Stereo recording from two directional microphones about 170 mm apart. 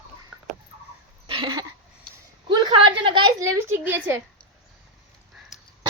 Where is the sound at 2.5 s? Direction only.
25° right (ahead or behind); by 4.2 s 10° right (ahead or behind).